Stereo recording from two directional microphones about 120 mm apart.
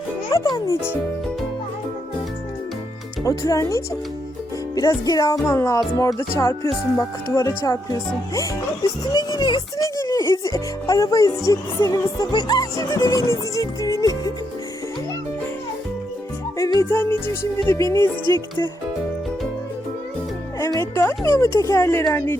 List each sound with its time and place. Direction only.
0.3 s speech: 30° left (ahead or behind)
3.2 s speech: 25° left (ahead or behind)
4.7 s music: 30° left (ahead or behind)
5.5 s speech: 25° left (ahead or behind)
10.0 s speech: 25° left (ahead or behind)
16.9 s speech: 20° left (ahead or behind)
20.6 s speech: 25° left (ahead or behind)